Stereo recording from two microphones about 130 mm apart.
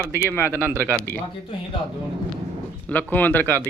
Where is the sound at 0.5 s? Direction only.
15° right (ahead or behind).